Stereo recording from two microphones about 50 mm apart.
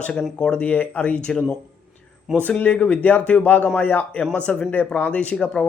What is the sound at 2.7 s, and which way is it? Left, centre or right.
Speech, left.